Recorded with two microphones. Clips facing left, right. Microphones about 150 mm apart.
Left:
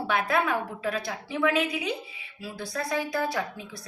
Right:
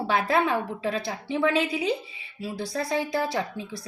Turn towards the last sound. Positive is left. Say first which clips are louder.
# right 2 dB
turn(degrees=-30)  # may be behind; listen again after turning